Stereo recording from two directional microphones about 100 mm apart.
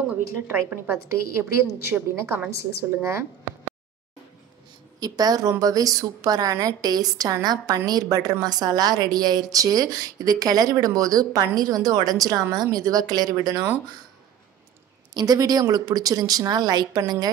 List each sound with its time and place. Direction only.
0.1 s a woman's voice: 15° right (ahead or behind)
5.0 s a woman's voice: 40° right (ahead or behind)
15.1 s a woman's voice: 40° right (ahead or behind)